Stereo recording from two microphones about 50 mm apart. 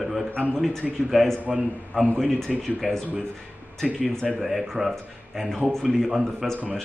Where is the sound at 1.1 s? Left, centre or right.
Centre.